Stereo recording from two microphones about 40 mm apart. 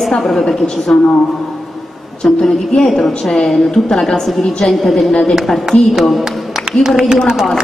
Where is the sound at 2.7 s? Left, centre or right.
Centre.